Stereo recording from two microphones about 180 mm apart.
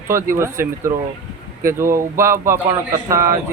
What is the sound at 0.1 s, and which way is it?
Speech, 15° right (ahead or behind).